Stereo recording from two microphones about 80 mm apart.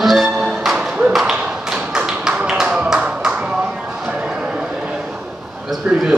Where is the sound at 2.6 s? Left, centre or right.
Centre.